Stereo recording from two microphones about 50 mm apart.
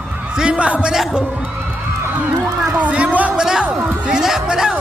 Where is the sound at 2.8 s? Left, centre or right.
Right.